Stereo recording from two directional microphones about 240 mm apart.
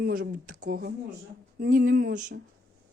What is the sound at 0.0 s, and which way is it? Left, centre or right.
Speech, right.